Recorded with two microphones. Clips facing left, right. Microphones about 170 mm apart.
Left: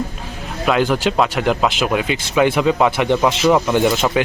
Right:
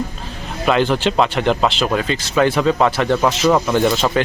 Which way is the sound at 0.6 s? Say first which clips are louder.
Even; 5° left (ahead or behind).